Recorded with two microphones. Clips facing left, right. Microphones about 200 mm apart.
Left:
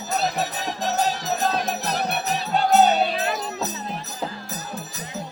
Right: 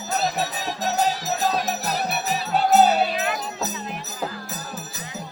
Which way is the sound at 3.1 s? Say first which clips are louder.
Left 1 dB; 30° left (ahead or behind).